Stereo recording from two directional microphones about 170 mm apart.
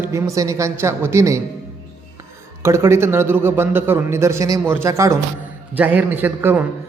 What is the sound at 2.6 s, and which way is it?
A man's voice, 15° right (ahead or behind).